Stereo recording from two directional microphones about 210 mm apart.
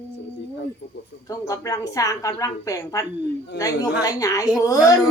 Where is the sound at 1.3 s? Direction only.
15° left (ahead or behind).